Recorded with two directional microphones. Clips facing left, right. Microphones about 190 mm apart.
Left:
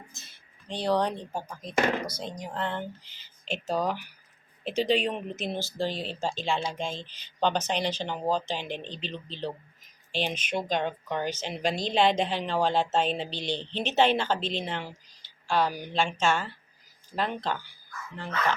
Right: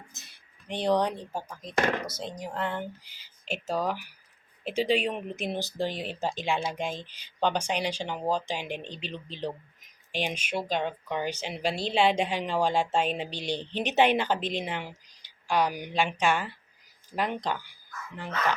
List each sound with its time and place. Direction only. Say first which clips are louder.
0.7 s speech: right 1 dB; 20° right (ahead or behind)
1.2 s speech: left 1 dB; centre (ahead or behind)